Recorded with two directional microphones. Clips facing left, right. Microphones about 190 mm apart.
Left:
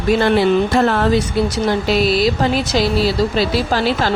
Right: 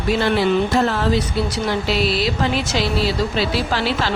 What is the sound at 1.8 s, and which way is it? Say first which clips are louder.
Speech: left 6 dB; 45° left (ahead or behind).